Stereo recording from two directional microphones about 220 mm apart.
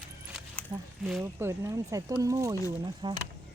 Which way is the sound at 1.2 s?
10° right (ahead or behind).